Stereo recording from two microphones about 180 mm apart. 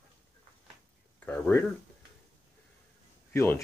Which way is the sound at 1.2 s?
10° left (ahead or behind).